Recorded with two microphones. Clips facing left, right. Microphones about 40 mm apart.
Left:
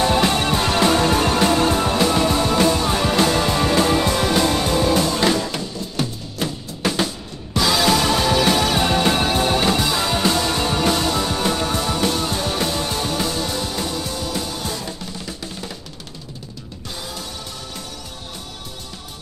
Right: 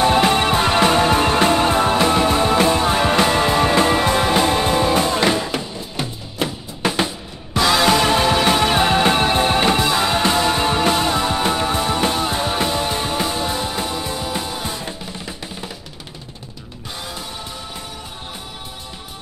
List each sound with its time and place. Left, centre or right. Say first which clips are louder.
0.0 s music: right 3 dB; right